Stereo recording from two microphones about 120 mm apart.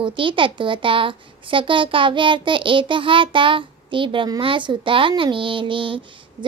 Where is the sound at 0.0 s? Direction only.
45° right (ahead or behind).